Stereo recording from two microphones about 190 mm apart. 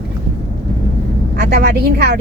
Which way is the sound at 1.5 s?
60° right (ahead or behind).